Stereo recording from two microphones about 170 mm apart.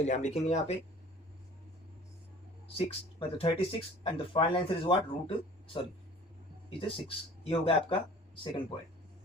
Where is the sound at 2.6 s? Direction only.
35° left (ahead or behind).